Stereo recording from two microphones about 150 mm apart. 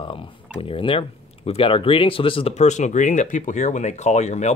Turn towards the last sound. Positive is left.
turn(degrees=50)  # may be behind; listen again after turning